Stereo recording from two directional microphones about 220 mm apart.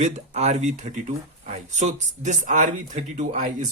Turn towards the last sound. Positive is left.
turn(degrees=-35)  # may be behind; listen again after turning